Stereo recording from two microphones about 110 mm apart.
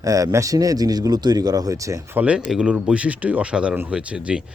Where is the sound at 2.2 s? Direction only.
10° right (ahead or behind).